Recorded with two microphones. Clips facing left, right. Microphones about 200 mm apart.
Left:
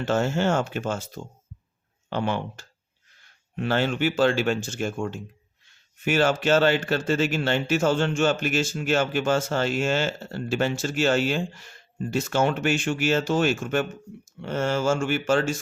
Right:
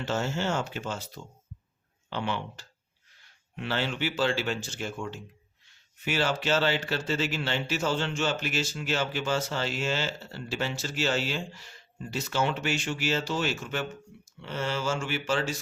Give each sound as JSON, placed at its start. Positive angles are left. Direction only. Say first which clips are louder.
{"t": 0.0, "sound": "speech", "louder": "left 6 dB", "side_deg": 50}